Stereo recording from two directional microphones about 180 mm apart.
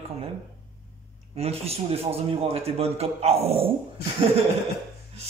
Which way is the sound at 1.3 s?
35° right (ahead or behind).